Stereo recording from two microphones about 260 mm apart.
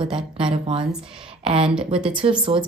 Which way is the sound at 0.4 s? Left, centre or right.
Right.